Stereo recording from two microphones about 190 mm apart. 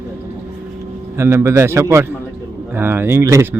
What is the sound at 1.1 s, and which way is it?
Speech, 15° right (ahead or behind).